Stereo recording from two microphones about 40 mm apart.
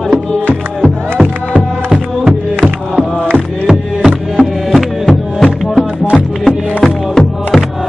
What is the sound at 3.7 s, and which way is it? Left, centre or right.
Music, centre.